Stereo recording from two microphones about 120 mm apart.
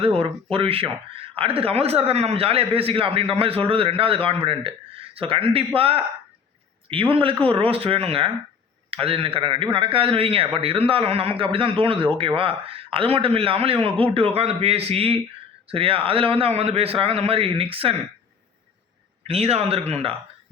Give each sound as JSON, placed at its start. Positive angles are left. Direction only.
{"t": 0.0, "sound": "a man's voice", "side_deg": -50}
{"t": 19.3, "sound": "speech", "side_deg": -60}